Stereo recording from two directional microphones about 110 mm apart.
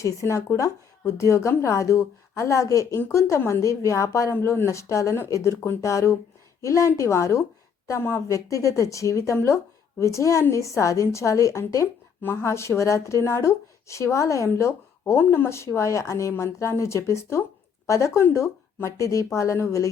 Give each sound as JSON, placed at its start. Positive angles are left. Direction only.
{"t": 0.0, "sound": "a woman's voice", "side_deg": 30}